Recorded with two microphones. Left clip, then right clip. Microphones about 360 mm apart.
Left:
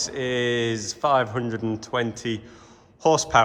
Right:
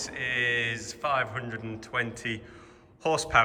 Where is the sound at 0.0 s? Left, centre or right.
Centre.